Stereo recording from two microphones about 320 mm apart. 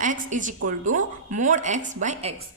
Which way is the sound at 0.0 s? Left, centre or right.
Right.